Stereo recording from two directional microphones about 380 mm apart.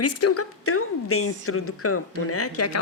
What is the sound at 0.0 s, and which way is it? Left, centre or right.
A woman's voice, left.